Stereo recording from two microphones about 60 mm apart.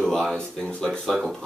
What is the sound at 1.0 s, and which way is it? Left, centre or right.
Speech, centre.